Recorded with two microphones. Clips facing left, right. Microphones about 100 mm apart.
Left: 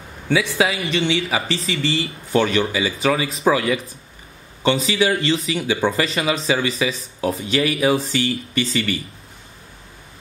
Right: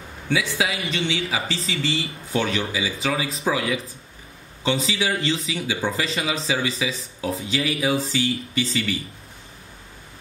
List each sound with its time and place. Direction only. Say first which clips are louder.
0.3 s speech: left 5 dB; 65° left (ahead or behind)
6.4 s speech: left 4 dB; 65° left (ahead or behind)